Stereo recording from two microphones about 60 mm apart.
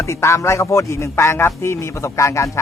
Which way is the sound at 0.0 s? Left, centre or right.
Left.